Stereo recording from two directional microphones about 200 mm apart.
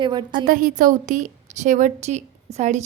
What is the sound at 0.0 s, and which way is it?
Speech, 20° right (ahead or behind).